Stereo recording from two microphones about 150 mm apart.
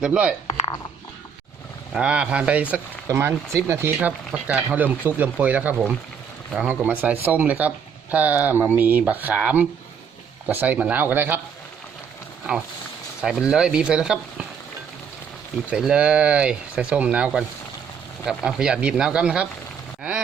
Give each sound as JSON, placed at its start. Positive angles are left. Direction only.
{"t": 0.0, "sound": "speech", "side_deg": -5}
{"t": 2.0, "sound": "speech", "side_deg": -5}
{"t": 13.2, "sound": "speech", "side_deg": -5}
{"t": 15.7, "sound": "speech", "side_deg": -5}
{"t": 20.0, "sound": "a sound", "side_deg": -5}